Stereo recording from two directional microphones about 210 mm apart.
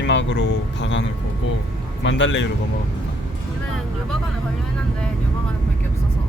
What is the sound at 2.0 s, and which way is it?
Speech, 60° left (ahead or behind).